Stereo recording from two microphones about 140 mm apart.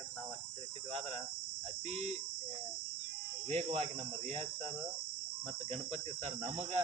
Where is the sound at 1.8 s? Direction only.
50° right (ahead or behind).